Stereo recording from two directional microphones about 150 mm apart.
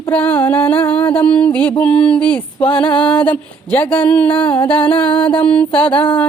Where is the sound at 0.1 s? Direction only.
10° left (ahead or behind).